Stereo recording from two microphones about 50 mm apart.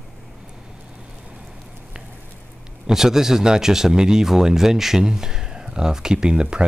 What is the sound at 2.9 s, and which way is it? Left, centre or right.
Speech, centre.